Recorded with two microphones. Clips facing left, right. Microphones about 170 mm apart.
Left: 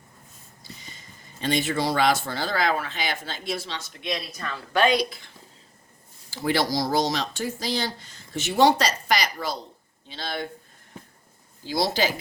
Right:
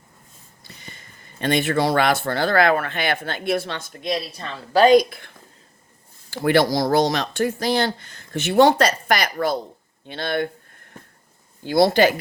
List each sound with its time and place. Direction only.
0.6 s speech: 60° right (ahead or behind)
4.0 s speech: 30° right (ahead or behind); by 5.3 s 55° right (ahead or behind)
6.3 s speech: 60° right (ahead or behind)
11.6 s speech: 55° right (ahead or behind)